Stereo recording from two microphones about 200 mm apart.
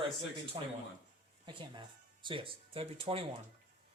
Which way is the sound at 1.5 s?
25° right (ahead or behind).